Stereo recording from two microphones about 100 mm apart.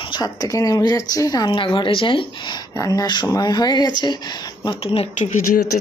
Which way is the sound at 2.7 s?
35° left (ahead or behind).